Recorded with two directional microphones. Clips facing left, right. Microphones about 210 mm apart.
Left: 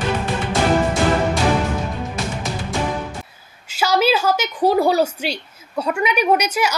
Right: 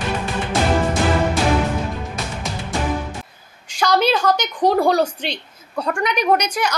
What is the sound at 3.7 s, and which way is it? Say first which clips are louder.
A woman's voice: even; 5° left (ahead or behind).